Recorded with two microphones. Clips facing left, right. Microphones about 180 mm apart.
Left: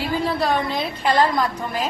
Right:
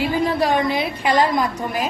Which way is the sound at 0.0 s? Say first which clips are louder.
Right 3 dB; 15° right (ahead or behind).